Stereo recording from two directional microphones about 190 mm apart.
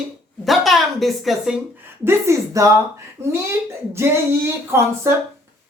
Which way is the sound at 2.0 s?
15° right (ahead or behind).